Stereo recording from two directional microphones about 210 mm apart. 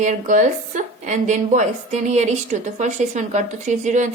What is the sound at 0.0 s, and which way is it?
A woman's voice, 35° right (ahead or behind).